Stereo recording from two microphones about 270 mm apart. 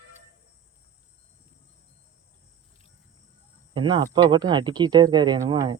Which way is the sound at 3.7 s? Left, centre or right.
Centre.